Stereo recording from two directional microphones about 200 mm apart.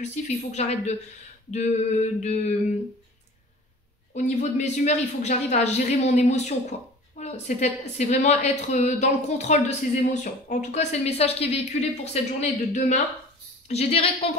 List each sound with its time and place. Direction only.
0.0 s a woman's voice: 35° left (ahead or behind)
4.1 s a woman's voice: 35° left (ahead or behind)